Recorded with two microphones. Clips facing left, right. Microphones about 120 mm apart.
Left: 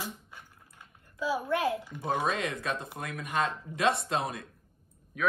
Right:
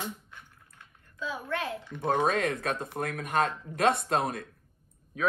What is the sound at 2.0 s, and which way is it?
Speech, 45° right (ahead or behind).